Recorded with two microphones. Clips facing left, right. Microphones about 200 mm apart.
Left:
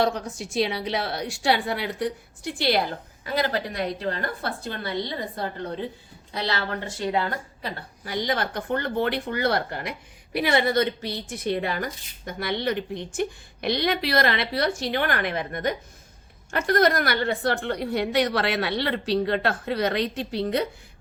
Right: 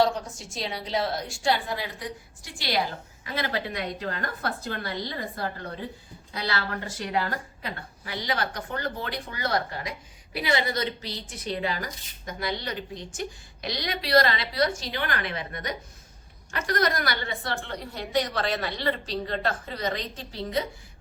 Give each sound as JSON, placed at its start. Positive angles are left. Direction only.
{"t": 0.0, "sound": "a woman's voice", "side_deg": 65}
{"t": 3.3, "sound": "a woman's voice", "side_deg": 40}
{"t": 7.0, "sound": "a woman's voice", "side_deg": 25}
{"t": 8.2, "sound": "a woman's voice", "side_deg": 50}